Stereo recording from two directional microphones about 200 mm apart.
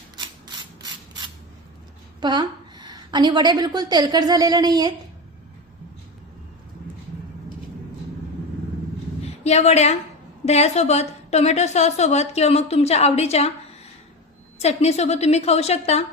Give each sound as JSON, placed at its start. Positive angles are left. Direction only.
{"t": 0.4, "sound": "mechanisms", "side_deg": -20}
{"t": 2.2, "sound": "a woman's voice", "side_deg": -20}
{"t": 9.2, "sound": "a woman's voice", "side_deg": 35}
{"t": 14.6, "sound": "a woman's voice", "side_deg": 35}